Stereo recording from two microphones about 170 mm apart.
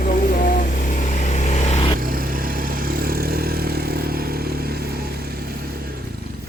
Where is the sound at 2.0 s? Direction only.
55° right (ahead or behind).